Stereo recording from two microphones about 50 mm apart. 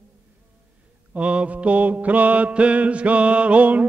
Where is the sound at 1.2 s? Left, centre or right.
Right.